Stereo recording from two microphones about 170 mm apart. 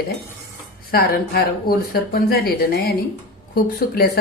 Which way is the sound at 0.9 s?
60° left (ahead or behind).